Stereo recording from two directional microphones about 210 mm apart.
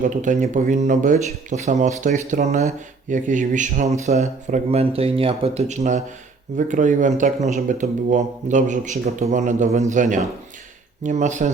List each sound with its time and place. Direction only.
0.0 s speech: 35° right (ahead or behind)